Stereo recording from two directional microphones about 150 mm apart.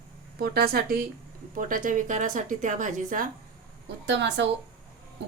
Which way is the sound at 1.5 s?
60° right (ahead or behind).